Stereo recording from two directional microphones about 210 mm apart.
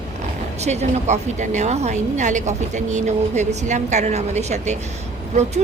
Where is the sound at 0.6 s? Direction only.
30° right (ahead or behind).